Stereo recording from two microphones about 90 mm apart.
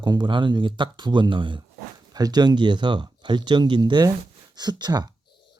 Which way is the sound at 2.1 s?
50° right (ahead or behind).